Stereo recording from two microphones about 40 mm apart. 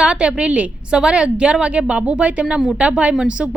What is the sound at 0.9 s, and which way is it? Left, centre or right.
A woman's voice, right.